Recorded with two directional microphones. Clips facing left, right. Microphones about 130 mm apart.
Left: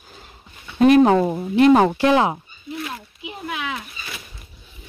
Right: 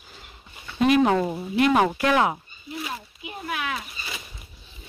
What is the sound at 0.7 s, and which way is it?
Speech, 45° left (ahead or behind).